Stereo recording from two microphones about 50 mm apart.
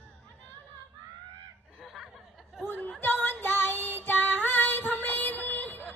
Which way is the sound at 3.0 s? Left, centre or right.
Left.